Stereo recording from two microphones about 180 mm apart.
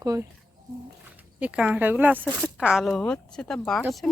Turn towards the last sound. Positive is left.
turn(degrees=0)  # may be behind; listen again after turning